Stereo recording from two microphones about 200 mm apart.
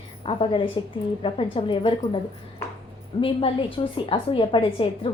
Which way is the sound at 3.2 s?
25° left (ahead or behind).